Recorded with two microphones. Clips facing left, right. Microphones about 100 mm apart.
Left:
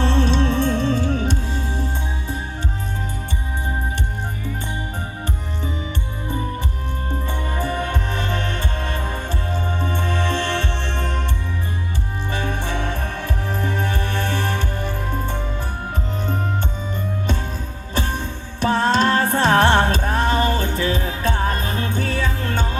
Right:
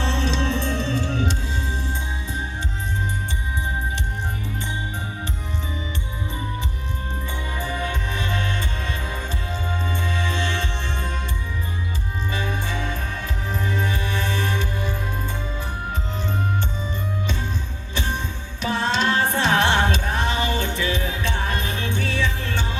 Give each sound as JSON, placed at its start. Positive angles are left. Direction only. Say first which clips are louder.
{"t": 0.0, "sound": "music", "louder": "left 5 dB", "side_deg": 45}
{"t": 7.3, "sound": "music", "louder": "left 4 dB", "side_deg": 50}
{"t": 12.3, "sound": "music", "louder": "left 3 dB", "side_deg": 55}
{"t": 17.9, "sound": "music", "louder": "left 3 dB", "side_deg": 50}